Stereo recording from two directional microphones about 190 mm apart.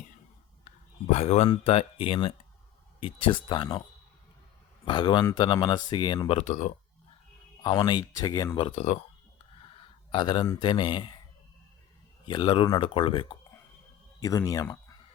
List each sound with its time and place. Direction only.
1.1 s speech: 35° left (ahead or behind)
4.9 s speech: 25° left (ahead or behind); by 6.7 s 40° left (ahead or behind)
7.6 s speech: 20° left (ahead or behind)
8.7 s speech: 35° left (ahead or behind)
9.6 s a sound: 25° left (ahead or behind)
12.2 s speech: 25° left (ahead or behind)